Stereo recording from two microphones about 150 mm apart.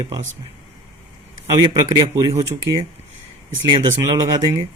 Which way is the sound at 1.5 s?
30° right (ahead or behind).